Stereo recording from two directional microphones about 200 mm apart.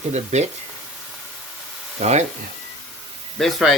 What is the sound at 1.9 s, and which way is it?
Speech, 35° right (ahead or behind).